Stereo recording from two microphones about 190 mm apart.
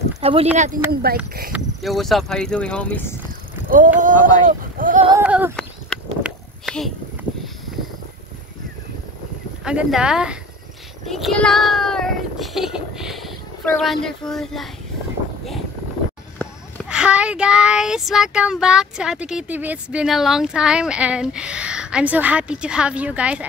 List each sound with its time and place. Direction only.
0.2 s speech: 30° right (ahead or behind)
1.1 s speech: 50° right (ahead or behind)
1.5 s speech: centre (ahead or behind)
3.3 s a sound: 45° right (ahead or behind)
4.0 s speech: 45° right (ahead or behind)
5.1 s a sound: 10° right (ahead or behind)
5.9 s a sound: 5° left (ahead or behind)
9.7 s speech: 5° right (ahead or behind)
16.8 s speech: 5° right (ahead or behind)